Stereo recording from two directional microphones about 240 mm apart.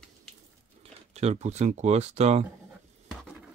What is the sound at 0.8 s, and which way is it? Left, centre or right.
Speech, right.